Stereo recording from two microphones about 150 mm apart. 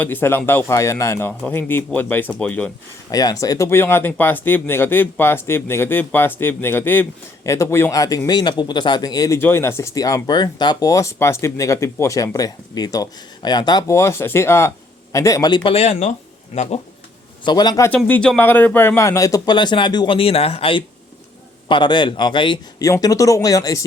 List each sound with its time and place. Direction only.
0.0 s speech: 15° left (ahead or behind)
3.1 s speech: 25° left (ahead or behind); by 16.8 s 45° left (ahead or behind)
17.4 s speech: 30° left (ahead or behind)
17.9 s speech: 5° left (ahead or behind); by 23.8 s 20° left (ahead or behind)